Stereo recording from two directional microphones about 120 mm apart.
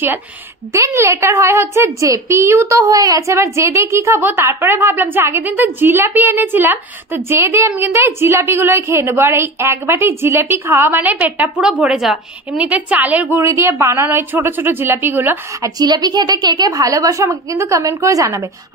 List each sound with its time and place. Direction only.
0.7 s a woman's voice: 25° right (ahead or behind)
15.8 s a woman's voice: 35° right (ahead or behind)